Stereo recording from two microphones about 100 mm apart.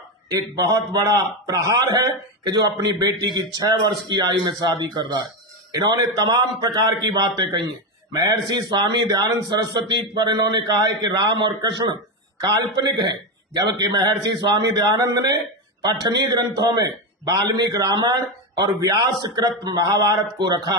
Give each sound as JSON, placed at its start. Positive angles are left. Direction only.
{"t": 0.3, "sound": "a man's voice", "side_deg": -40}